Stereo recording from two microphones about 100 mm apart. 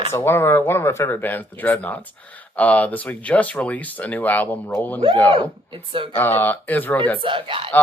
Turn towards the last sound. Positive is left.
turn(degrees=-60)  # may be behind; listen again after turning